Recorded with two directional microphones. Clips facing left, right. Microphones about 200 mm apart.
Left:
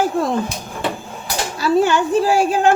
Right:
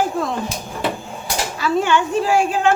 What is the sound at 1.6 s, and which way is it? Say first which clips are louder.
A woman's voice: left 3 dB; 35° left (ahead or behind).